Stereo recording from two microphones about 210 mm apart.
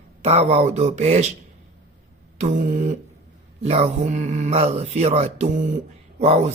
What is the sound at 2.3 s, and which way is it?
Speech, 35° right (ahead or behind).